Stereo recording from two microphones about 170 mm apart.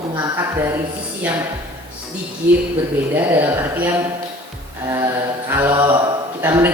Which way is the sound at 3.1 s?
10° right (ahead or behind).